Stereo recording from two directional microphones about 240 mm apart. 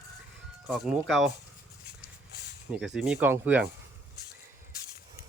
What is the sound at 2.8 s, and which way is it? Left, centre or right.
Speech, centre.